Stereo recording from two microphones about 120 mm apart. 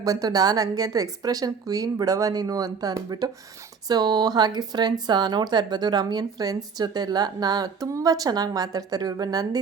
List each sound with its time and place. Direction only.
0.0 s speech: 30° right (ahead or behind)